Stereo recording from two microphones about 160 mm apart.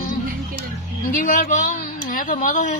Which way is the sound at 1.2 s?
55° left (ahead or behind).